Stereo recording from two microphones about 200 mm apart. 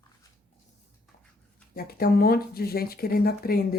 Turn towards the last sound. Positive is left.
turn(degrees=50)  # may be behind; listen again after turning